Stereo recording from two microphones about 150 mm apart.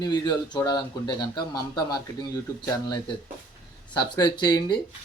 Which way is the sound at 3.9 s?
30° left (ahead or behind).